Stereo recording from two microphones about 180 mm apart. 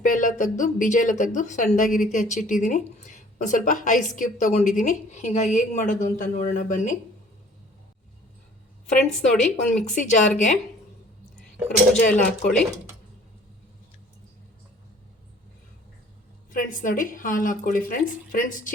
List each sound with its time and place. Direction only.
0.0 s speech: 45° left (ahead or behind)
8.9 s speech: 45° left (ahead or behind)
12.0 s speech: 45° left (ahead or behind)
16.5 s speech: 45° left (ahead or behind)